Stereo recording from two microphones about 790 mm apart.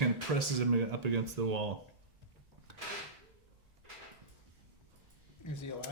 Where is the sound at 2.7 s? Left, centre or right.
Right.